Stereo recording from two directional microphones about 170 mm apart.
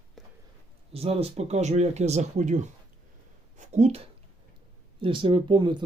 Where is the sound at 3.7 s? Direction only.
40° right (ahead or behind).